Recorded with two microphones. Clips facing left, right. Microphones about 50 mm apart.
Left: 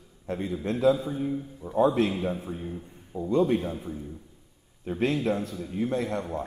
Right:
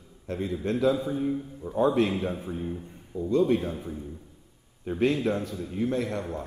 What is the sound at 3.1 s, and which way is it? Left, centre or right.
Speech, left.